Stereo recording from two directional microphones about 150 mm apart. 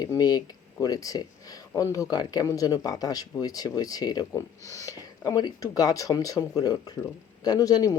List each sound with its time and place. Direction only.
0.0 s speech: 25° left (ahead or behind)